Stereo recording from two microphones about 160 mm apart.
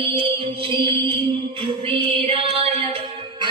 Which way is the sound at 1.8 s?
35° right (ahead or behind).